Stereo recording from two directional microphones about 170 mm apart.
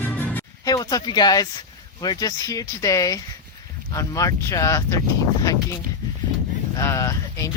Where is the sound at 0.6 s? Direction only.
20° left (ahead or behind).